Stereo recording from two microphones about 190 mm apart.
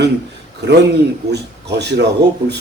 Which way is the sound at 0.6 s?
65° right (ahead or behind).